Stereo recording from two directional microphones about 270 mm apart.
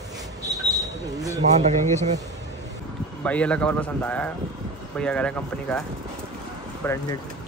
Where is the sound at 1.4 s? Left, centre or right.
Right.